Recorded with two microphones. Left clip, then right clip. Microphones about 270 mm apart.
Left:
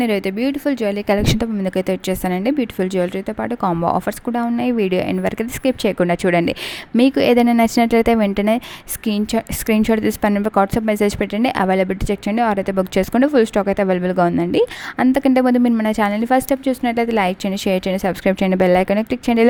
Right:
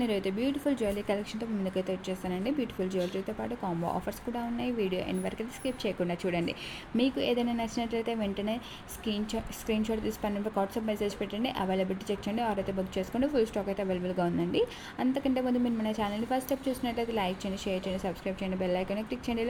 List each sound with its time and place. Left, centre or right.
0.0 s a woman's voice: left